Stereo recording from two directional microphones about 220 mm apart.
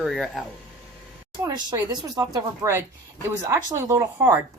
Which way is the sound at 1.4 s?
15° right (ahead or behind).